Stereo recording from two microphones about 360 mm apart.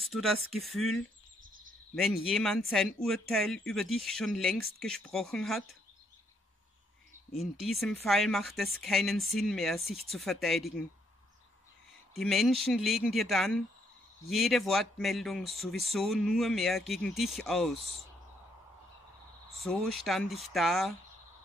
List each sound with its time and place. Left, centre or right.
0.0 s speech: centre
1.4 s a sound: right
2.2 s speech: centre
7.3 s speech: centre
12.1 s speech: centre
19.5 s speech: centre